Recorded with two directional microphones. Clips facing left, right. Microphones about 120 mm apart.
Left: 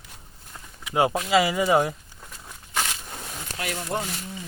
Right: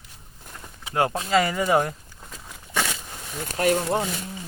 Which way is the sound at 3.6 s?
45° right (ahead or behind).